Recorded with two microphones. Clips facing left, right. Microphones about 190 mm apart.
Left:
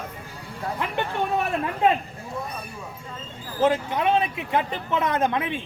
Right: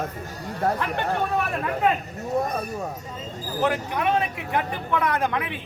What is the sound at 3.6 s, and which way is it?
A man's voice, 20° left (ahead or behind).